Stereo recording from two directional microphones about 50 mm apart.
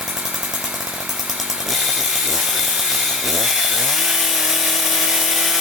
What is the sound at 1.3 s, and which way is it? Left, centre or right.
Chainsaw, centre.